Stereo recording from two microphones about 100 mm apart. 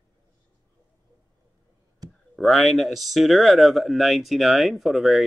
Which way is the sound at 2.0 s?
40° right (ahead or behind).